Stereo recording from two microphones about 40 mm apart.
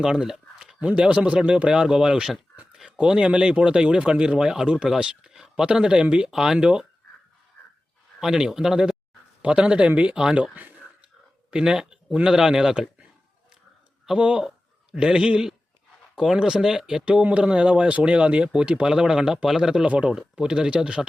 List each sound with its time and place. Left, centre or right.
0.0 s a sound: centre
0.8 s speech: right
5.3 s a sound: centre
5.6 s speech: right
8.2 s speech: centre
9.4 s speech: right
10.2 s speech: centre
10.5 s speech: right
11.5 s speech: centre
14.2 s speech: right; by 17.0 s centre
17.1 s speech: right
18.8 s speech: centre
19.8 s speech: right
20.4 s speech: centre